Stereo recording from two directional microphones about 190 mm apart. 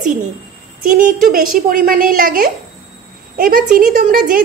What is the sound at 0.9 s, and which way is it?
A woman's voice, 45° right (ahead or behind).